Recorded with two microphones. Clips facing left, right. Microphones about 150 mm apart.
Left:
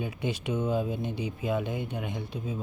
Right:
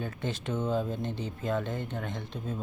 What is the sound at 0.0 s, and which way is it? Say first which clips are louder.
Speech: left 2 dB; 10° left (ahead or behind).